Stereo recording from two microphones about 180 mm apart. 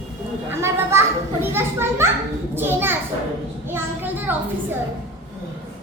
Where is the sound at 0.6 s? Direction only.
15° right (ahead or behind).